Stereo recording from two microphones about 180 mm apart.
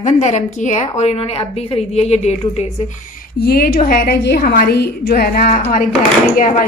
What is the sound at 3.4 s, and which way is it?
A woman's voice, 55° left (ahead or behind).